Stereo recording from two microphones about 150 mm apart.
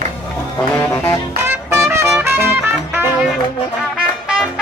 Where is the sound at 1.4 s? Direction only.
15° right (ahead or behind).